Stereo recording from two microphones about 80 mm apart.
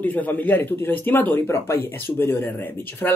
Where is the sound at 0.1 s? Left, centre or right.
Left.